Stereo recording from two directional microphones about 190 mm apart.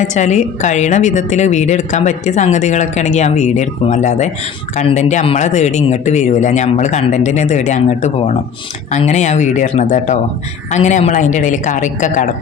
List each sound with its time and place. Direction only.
0.0 s a woman's voice: 40° left (ahead or behind)